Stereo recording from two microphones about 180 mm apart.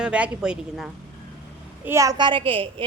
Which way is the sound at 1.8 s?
15° right (ahead or behind).